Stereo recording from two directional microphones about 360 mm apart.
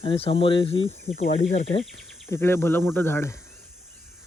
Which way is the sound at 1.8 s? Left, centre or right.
Centre.